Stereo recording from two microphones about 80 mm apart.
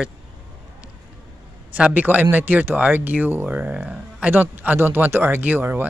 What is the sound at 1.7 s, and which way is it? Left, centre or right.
Speech, centre.